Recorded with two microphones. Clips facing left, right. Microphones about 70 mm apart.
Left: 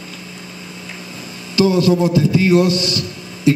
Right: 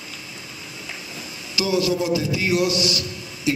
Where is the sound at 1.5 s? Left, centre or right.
Left.